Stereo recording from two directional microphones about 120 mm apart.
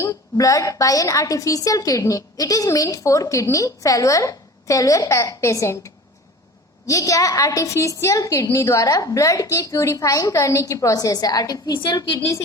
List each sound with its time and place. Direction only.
0.0 s a woman's voice: 25° left (ahead or behind)